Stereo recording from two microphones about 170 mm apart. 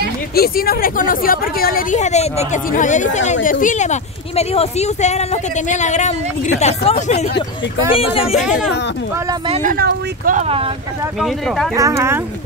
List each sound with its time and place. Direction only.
0.3 s speech: 65° left (ahead or behind); by 8.5 s 35° left (ahead or behind)
9.5 s speech: 50° right (ahead or behind)
10.4 s speech: 35° right (ahead or behind)
11.1 s speech: centre (ahead or behind)
11.7 s speech: 15° right (ahead or behind)